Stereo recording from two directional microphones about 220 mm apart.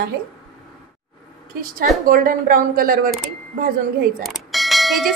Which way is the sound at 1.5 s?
40° right (ahead or behind).